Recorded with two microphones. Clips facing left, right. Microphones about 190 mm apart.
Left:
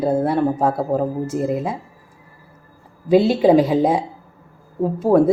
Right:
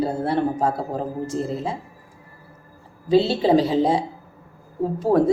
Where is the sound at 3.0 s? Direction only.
15° left (ahead or behind).